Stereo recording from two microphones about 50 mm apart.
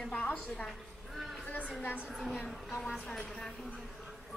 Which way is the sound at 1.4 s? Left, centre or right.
Left.